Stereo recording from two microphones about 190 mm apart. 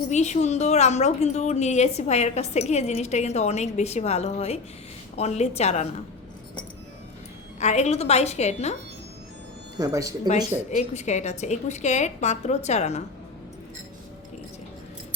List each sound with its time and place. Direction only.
0.1 s a woman's voice: 35° left (ahead or behind)
7.6 s a woman's voice: 35° left (ahead or behind)
9.7 s speech: 20° right (ahead or behind)
10.8 s a woman's voice: 35° left (ahead or behind)